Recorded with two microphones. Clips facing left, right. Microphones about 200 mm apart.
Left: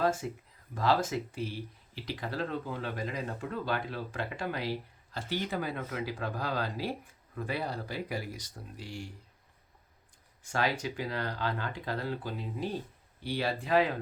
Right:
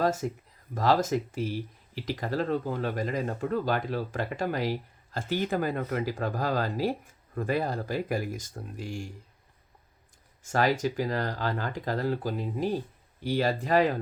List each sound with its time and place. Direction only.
0.0 s a sound: 40° right (ahead or behind)
0.7 s speech: 40° right (ahead or behind)
10.4 s speech: 45° right (ahead or behind)